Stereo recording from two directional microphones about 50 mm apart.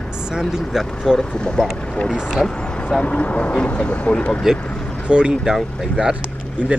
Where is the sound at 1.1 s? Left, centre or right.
Centre.